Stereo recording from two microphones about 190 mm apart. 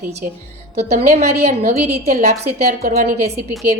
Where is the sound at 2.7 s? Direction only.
50° right (ahead or behind).